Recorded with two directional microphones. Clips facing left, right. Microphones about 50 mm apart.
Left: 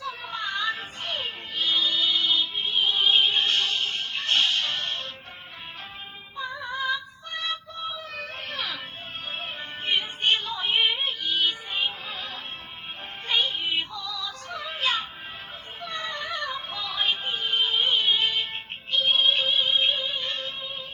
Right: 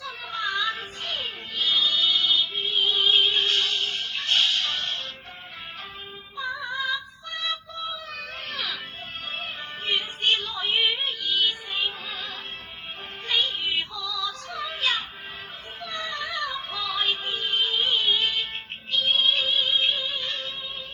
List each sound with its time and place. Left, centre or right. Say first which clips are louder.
0.0 s music: right 1 dB; left
6.3 s synthetic singing: right 2 dB; left
9.3 s music: even; centre
16.3 s synthetic singing: right 1 dB; left
18.9 s music: left 1 dB; left